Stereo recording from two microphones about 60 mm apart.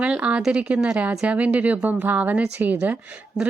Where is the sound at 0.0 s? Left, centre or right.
Right.